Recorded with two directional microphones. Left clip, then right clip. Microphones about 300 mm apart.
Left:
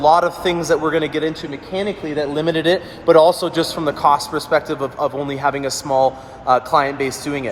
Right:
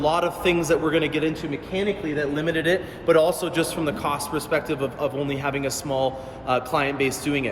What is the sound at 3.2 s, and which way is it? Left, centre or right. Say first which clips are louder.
A man's voice: left 7 dB; centre.